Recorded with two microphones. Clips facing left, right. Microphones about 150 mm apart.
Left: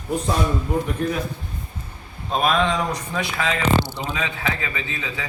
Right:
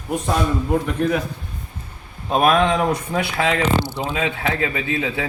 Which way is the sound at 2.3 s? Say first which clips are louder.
Right 4 dB; 55° right (ahead or behind).